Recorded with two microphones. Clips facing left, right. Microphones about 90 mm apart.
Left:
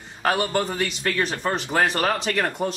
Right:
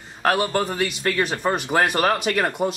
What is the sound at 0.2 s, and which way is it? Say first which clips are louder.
A man's voice: right 2 dB; centre (ahead or behind).